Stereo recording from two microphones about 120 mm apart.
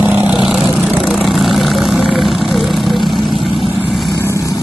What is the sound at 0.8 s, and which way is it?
Vehicle, 5° right (ahead or behind).